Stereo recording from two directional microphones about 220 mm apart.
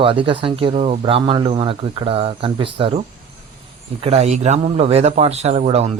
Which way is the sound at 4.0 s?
30° right (ahead or behind).